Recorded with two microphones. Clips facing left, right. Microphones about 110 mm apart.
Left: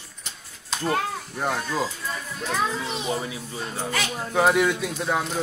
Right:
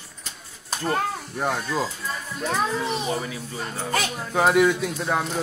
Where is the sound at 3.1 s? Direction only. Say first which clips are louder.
Even; 20° left (ahead or behind).